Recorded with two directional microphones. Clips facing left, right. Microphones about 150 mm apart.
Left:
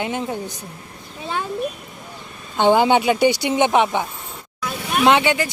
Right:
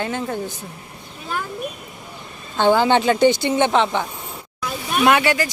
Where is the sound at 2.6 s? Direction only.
15° left (ahead or behind).